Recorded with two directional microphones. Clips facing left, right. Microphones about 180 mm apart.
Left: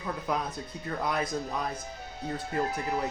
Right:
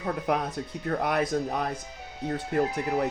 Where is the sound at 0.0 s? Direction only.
65° right (ahead or behind).